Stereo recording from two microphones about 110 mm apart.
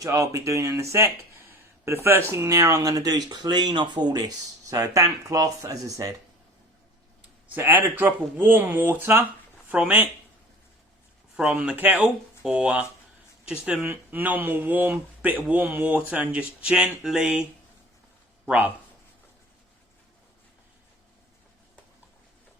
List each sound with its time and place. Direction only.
0.0 s speech: 30° right (ahead or behind)
7.5 s speech: 15° right (ahead or behind)
11.3 s speech: 10° right (ahead or behind)
18.4 s speech: 15° right (ahead or behind)